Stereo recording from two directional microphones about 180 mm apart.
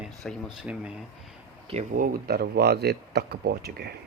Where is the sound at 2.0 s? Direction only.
60° right (ahead or behind).